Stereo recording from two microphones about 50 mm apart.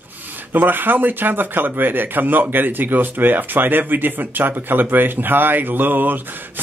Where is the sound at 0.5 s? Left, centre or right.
Right.